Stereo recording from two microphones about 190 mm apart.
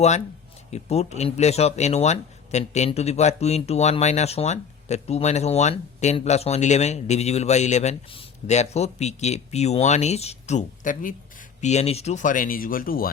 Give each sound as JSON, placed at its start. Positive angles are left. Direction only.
{"t": 0.7, "sound": "speech", "side_deg": 35}